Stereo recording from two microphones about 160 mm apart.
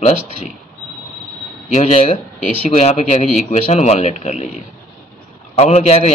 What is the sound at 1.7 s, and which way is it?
A man's voice, 40° left (ahead or behind).